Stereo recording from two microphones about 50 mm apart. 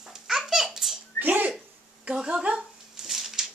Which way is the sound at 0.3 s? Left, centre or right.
Centre.